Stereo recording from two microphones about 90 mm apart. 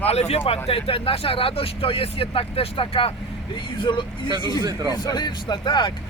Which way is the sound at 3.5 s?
65° left (ahead or behind).